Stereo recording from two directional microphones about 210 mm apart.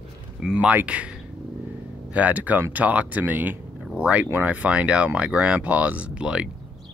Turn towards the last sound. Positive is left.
turn(degrees=-5)  # may be behind; listen again after turning